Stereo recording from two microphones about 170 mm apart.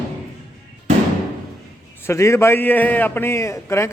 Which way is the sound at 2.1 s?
15° left (ahead or behind).